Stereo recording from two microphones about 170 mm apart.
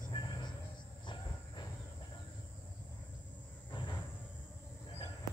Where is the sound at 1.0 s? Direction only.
25° left (ahead or behind).